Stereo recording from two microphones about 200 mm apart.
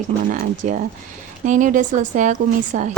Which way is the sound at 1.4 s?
40° right (ahead or behind).